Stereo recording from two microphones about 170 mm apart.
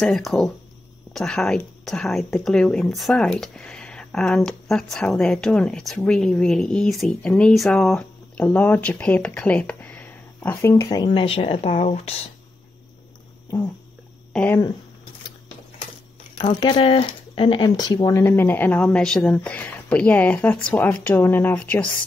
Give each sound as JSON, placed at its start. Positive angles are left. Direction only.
{"t": 0.0, "sound": "a woman's voice", "side_deg": 0}
{"t": 11.1, "sound": "speech", "side_deg": 30}
{"t": 14.3, "sound": "speech", "side_deg": 10}
{"t": 16.3, "sound": "speech", "side_deg": 25}